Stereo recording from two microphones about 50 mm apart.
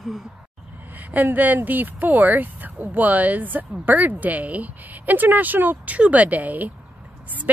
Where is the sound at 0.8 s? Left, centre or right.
Right.